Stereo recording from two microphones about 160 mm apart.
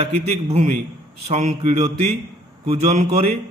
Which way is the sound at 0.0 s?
40° right (ahead or behind).